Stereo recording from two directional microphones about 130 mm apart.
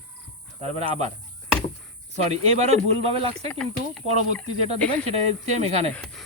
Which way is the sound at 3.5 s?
10° left (ahead or behind).